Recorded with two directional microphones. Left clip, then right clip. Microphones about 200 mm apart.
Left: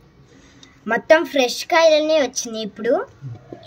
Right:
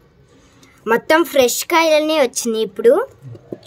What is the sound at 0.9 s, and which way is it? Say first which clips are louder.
A woman's voice: right 1 dB; 55° right (ahead or behind).